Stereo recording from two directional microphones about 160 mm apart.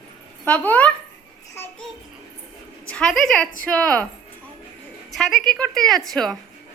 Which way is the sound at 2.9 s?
5° left (ahead or behind).